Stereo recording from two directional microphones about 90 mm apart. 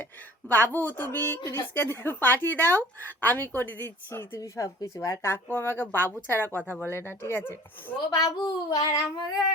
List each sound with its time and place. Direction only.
0.0 s a woman's voice: 20° left (ahead or behind)
8.1 s child singing: 45° left (ahead or behind)